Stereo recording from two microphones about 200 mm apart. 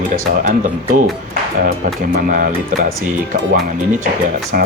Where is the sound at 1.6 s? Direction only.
45° right (ahead or behind).